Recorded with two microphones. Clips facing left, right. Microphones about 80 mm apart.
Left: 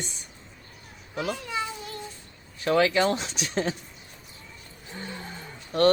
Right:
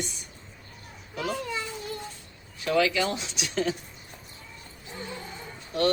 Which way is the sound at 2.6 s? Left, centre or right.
Left.